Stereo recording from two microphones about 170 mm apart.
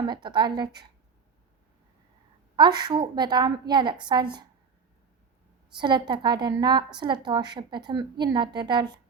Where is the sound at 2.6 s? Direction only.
25° right (ahead or behind).